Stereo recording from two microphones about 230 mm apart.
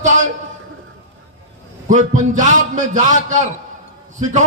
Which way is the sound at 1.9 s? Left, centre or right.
Right.